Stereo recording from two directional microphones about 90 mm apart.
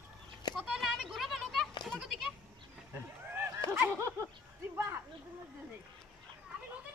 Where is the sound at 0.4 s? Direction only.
55° left (ahead or behind).